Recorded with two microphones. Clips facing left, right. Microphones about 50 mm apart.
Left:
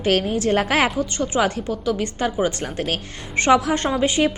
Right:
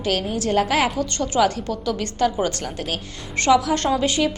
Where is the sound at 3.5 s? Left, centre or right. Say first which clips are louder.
Even; left.